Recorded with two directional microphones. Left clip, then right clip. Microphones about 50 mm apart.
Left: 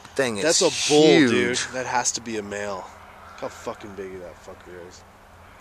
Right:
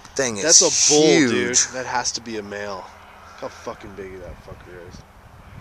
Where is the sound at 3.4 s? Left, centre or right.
Left.